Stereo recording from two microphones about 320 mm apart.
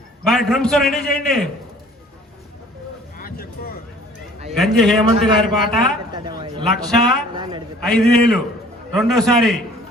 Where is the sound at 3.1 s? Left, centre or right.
Left.